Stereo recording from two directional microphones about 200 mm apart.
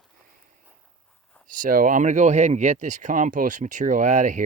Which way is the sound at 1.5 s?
40° right (ahead or behind).